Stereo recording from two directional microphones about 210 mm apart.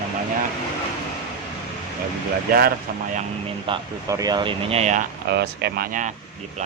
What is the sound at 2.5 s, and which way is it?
Speech, 45° right (ahead or behind).